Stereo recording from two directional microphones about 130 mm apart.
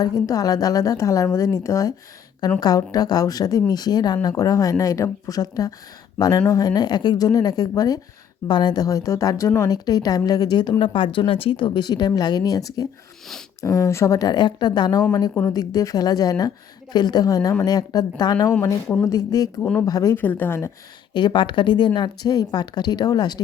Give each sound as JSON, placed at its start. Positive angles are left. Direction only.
{"t": 0.0, "sound": "a woman's voice", "side_deg": 30}
{"t": 20.1, "sound": "a woman's voice", "side_deg": 15}
{"t": 21.1, "sound": "a woman's voice", "side_deg": 35}